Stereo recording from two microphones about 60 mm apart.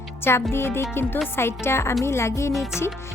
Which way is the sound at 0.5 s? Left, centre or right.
Left.